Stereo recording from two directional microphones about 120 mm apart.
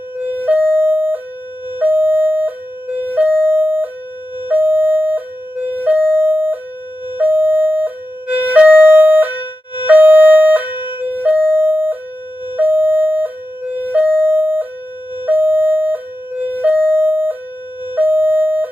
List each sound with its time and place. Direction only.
0.2 s ambulance: 15° right (ahead or behind)
1.8 s siren: 15° right (ahead or behind)
2.9 s ambulance: 15° right (ahead or behind)
7.2 s siren: 15° right (ahead or behind)
17.9 s a sound: 15° right (ahead or behind)